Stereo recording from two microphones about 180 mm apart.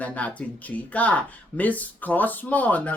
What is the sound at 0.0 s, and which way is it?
Speech, 10° left (ahead or behind).